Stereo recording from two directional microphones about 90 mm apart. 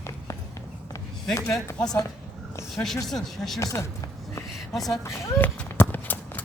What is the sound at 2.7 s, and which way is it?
Speech, 5° left (ahead or behind).